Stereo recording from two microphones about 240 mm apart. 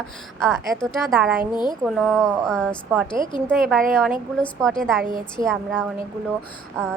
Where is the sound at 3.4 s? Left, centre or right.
Centre.